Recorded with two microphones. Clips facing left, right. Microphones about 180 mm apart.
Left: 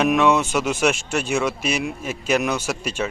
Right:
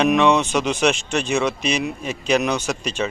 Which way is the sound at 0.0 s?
5° left (ahead or behind).